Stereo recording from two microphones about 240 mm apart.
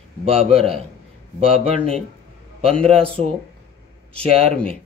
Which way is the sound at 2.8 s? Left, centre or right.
Right.